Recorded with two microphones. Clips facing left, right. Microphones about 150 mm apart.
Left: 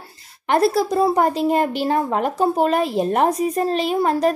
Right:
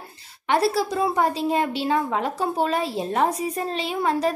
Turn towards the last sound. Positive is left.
turn(degrees=45)  # may be behind; listen again after turning